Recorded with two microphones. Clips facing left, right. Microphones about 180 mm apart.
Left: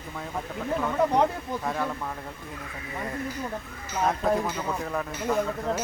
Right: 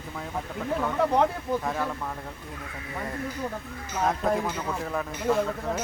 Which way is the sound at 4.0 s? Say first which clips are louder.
Left 1 dB; centre (ahead or behind).